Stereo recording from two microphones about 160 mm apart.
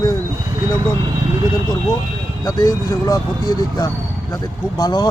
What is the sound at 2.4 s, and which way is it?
Speech, 20° left (ahead or behind).